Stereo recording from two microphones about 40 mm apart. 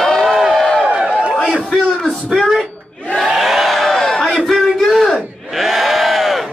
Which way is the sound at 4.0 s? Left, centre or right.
Centre.